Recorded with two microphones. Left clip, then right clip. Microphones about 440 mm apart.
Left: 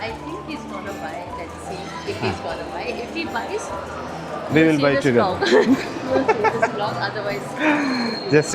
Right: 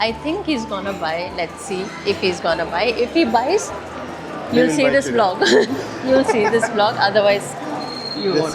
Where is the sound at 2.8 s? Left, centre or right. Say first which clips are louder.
Right 10 dB; right.